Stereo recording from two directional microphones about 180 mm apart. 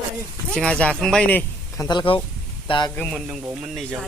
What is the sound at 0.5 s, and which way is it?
Speech, 5° left (ahead or behind).